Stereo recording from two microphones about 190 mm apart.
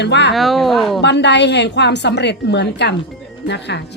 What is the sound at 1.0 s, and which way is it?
A woman's voice, 65° left (ahead or behind).